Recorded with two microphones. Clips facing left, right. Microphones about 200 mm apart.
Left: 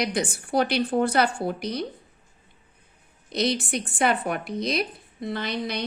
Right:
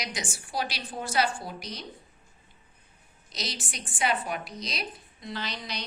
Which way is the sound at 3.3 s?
60° left (ahead or behind).